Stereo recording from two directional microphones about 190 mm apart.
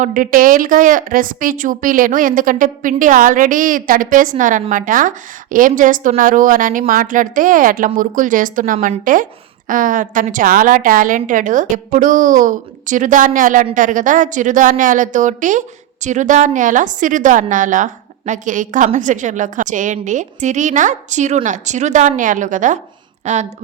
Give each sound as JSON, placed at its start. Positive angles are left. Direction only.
{"t": 0.0, "sound": "a woman's voice", "side_deg": -45}